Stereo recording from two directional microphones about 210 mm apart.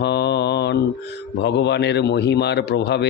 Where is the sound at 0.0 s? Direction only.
55° left (ahead or behind).